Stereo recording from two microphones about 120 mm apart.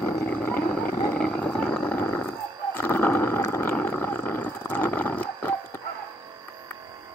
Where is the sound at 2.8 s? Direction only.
15° left (ahead or behind).